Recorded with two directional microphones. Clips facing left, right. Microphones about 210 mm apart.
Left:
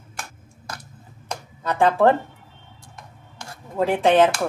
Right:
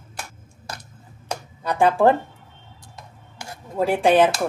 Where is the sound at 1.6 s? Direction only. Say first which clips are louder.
Even; 15° right (ahead or behind).